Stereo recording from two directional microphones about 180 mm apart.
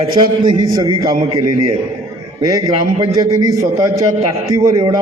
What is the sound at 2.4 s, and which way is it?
A man's voice, 20° right (ahead or behind).